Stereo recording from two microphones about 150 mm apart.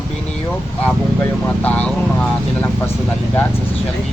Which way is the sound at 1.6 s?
10° left (ahead or behind).